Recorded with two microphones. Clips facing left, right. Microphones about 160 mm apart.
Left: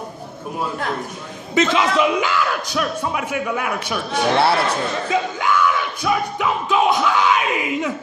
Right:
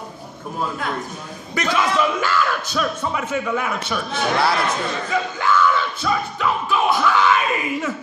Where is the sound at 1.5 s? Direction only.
20° left (ahead or behind).